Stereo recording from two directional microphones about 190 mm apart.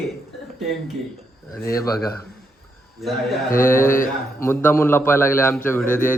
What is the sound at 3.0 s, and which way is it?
Speech, centre (ahead or behind).